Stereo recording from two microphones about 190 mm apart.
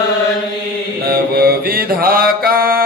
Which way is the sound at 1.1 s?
50° right (ahead or behind).